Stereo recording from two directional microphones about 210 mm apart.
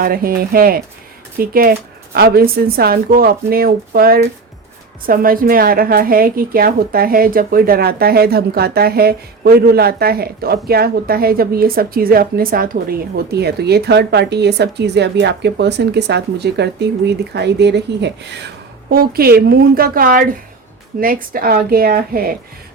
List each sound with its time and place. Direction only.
0.0 s a woman's voice: 45° right (ahead or behind)